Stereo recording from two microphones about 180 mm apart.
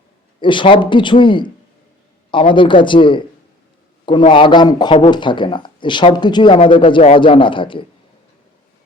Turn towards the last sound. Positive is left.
turn(degrees=30)  # may be behind; listen again after turning